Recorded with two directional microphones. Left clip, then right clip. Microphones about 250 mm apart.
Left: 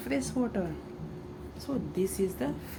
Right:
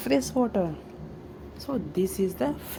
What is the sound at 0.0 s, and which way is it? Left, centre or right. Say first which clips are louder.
Speech: right 7 dB; right.